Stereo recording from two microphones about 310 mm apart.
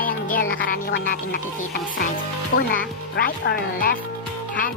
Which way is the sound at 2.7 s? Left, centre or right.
Left.